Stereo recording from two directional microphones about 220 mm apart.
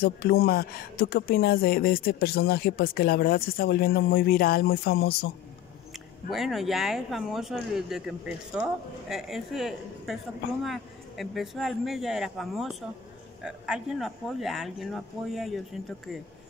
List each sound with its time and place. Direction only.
0.0 s speech: 45° left (ahead or behind)
6.3 s speech: centre (ahead or behind)